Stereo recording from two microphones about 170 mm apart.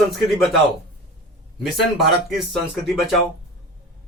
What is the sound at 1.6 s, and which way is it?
Speech, centre (ahead or behind).